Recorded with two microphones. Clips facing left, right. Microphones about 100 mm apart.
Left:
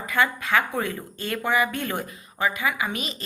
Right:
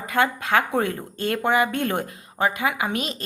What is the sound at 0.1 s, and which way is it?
A woman's voice, 60° right (ahead or behind).